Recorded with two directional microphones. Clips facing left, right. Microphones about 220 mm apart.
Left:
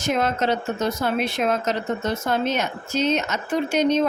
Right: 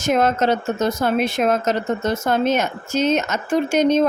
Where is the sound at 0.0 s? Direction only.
45° right (ahead or behind).